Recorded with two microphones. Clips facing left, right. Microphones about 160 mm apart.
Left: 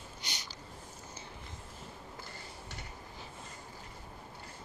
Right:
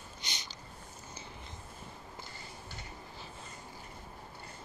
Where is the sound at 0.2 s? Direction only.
10° left (ahead or behind).